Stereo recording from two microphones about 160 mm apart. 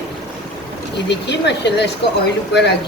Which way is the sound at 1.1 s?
90° left.